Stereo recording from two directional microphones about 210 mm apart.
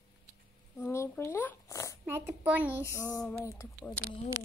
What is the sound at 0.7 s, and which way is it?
Zipper, 10° left (ahead or behind).